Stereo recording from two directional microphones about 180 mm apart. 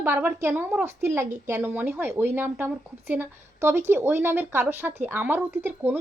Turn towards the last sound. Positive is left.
turn(degrees=-10)  # may be behind; listen again after turning